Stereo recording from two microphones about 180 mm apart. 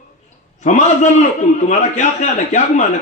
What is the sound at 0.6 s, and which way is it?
A man's voice, 40° left (ahead or behind).